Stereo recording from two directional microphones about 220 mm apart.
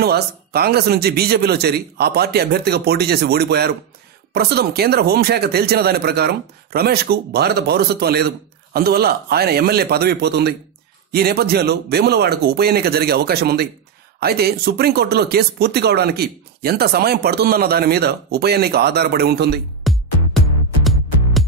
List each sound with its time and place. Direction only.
0.0 s speech: 45° right (ahead or behind)
19.9 s music: centre (ahead or behind)